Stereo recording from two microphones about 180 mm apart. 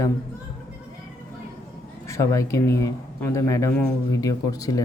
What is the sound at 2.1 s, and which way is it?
Speech, 15° left (ahead or behind).